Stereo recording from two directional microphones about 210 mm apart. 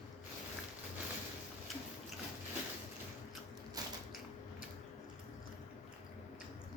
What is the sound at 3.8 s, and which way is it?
Mechanisms, 15° right (ahead or behind).